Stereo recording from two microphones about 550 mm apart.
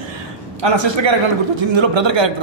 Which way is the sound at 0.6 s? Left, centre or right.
Right.